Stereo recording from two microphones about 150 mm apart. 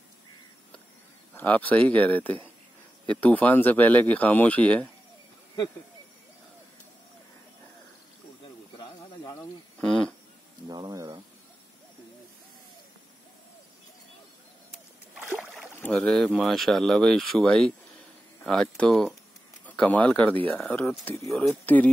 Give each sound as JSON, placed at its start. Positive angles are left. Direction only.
{"t": 1.3, "sound": "speech", "side_deg": 10}
{"t": 8.7, "sound": "snake", "side_deg": 25}
{"t": 9.8, "sound": "speech", "side_deg": 5}
{"t": 10.7, "sound": "speech", "side_deg": -25}
{"t": 15.1, "sound": "boat", "side_deg": 0}
{"t": 15.8, "sound": "speech", "side_deg": 5}
{"t": 21.0, "sound": "speech", "side_deg": 10}
{"t": 21.3, "sound": "speech", "side_deg": 0}